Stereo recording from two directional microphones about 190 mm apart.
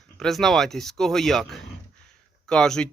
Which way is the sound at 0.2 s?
Centre (ahead or behind).